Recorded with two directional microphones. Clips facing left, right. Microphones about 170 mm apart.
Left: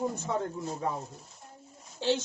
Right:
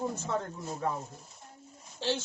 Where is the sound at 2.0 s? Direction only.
15° left (ahead or behind).